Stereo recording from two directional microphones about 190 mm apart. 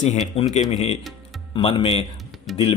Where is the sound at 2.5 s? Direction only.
Centre (ahead or behind).